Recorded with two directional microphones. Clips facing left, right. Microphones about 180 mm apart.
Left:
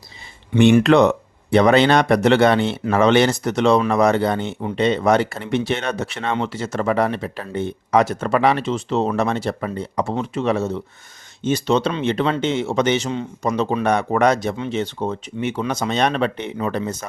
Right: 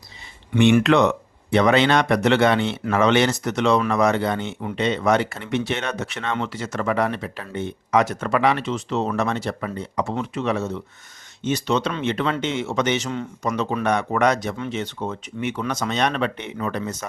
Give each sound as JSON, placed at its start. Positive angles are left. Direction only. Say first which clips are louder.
{"t": 0.5, "sound": "speech", "louder": "left 3 dB", "side_deg": 35}